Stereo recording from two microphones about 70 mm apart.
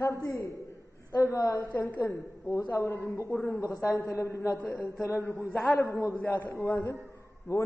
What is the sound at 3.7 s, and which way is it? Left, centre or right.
Speech, left.